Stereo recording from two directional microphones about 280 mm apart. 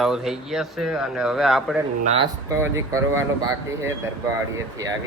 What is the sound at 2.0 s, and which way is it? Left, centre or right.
Speech, right.